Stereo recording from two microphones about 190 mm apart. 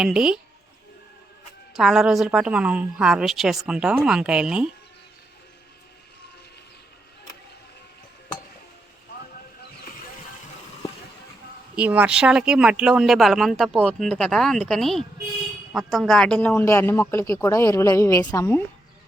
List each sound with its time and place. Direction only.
0.0 s a woman's voice: 5° right (ahead or behind)
1.7 s a woman's voice: centre (ahead or behind)
11.8 s a woman's voice: 5° right (ahead or behind); by 18.6 s 10° left (ahead or behind)